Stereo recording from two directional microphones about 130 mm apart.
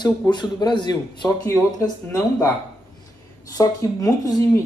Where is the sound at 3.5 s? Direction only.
25° left (ahead or behind).